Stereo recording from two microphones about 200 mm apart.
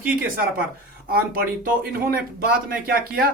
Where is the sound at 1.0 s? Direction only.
50° right (ahead or behind).